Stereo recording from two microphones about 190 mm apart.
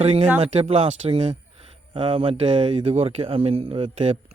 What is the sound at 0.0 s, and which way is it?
Speech, 30° right (ahead or behind).